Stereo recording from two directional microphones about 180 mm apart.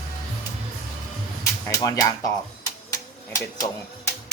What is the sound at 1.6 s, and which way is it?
Speech, 20° left (ahead or behind).